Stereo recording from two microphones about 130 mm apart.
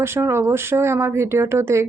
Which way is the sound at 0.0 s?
20° right (ahead or behind).